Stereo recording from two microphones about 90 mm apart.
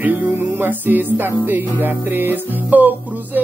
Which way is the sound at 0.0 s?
20° right (ahead or behind).